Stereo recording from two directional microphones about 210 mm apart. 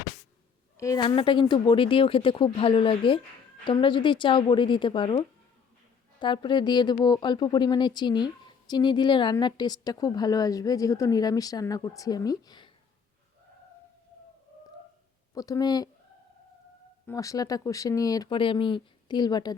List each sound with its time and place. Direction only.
0.8 s speech: 15° left (ahead or behind)
15.4 s speech: 15° left (ahead or behind)
17.1 s speech: 15° left (ahead or behind)